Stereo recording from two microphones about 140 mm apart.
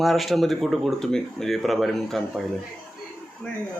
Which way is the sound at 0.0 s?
Centre (ahead or behind).